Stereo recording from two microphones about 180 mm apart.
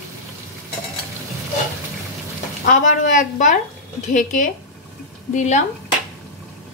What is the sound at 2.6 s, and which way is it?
Speech, 45° left (ahead or behind).